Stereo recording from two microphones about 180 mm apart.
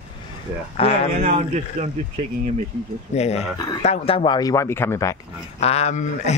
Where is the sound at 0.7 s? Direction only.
35° left (ahead or behind).